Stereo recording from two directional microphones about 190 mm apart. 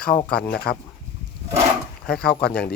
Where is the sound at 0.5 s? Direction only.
50° left (ahead or behind).